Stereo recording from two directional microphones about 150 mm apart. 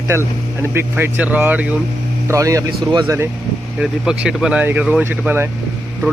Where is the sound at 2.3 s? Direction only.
20° right (ahead or behind).